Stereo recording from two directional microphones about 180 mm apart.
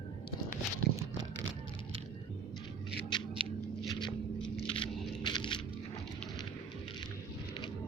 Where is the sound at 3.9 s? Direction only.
25° left (ahead or behind).